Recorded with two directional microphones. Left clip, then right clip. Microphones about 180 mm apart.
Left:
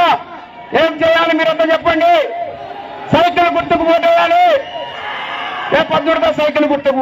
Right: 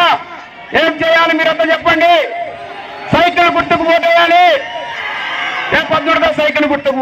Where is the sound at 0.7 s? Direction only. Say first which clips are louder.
Right 1 dB; 50° left (ahead or behind).